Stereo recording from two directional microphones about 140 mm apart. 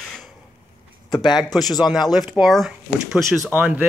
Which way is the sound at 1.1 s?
30° left (ahead or behind).